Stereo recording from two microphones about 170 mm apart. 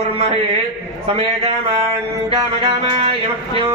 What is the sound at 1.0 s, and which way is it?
Speech, 35° right (ahead or behind).